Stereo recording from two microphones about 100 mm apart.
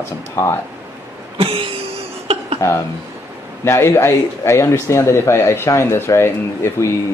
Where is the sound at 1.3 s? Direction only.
75° right (ahead or behind).